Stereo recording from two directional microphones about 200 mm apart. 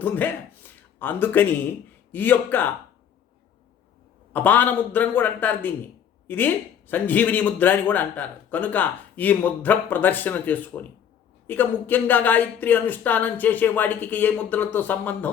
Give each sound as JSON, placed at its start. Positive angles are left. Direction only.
{"t": 0.0, "sound": "a man's voice", "side_deg": 10}
{"t": 4.3, "sound": "a man's voice", "side_deg": 10}